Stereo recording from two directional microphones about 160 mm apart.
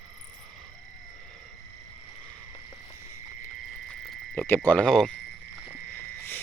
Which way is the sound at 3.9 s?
10° left (ahead or behind).